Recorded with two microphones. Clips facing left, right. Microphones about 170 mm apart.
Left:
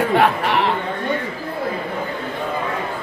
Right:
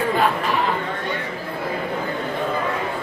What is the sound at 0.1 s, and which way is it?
Chatter, 80° left.